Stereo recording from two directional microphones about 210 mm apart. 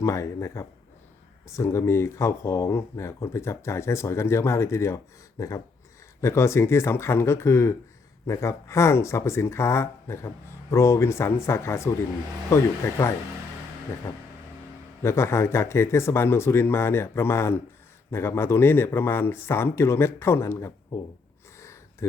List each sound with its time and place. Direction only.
0.0 s speech: 15° left (ahead or behind)
15.0 s speech: 10° left (ahead or behind)